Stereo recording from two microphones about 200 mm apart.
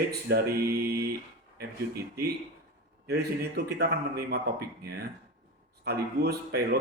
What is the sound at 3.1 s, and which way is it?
Speech, 55° right (ahead or behind).